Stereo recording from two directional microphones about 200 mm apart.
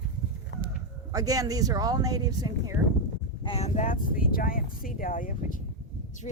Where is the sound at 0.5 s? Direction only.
65° left (ahead or behind).